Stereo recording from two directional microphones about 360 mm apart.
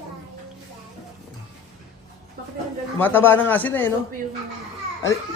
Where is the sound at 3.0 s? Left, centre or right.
Centre.